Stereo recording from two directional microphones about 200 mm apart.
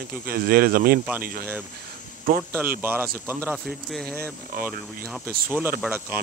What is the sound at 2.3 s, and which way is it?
Speech, 45° right (ahead or behind).